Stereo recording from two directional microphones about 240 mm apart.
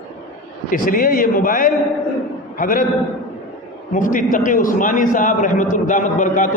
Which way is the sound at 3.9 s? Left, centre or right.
Left.